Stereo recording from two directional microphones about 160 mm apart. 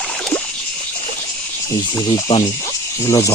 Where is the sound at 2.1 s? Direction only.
30° left (ahead or behind).